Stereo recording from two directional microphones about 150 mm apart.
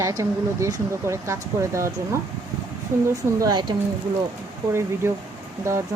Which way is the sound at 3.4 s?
25° right (ahead or behind).